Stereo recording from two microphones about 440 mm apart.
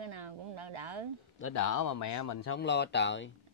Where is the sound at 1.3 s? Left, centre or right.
Left.